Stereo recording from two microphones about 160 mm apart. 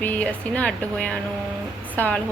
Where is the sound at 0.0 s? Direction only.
10° left (ahead or behind).